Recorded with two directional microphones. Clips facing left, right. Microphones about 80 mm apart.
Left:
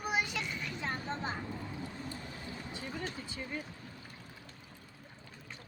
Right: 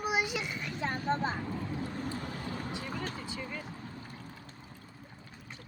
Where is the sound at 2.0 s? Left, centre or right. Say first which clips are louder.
Right 6 dB; right.